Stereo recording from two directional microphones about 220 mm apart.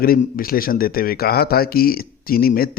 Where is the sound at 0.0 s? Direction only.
40° left (ahead or behind).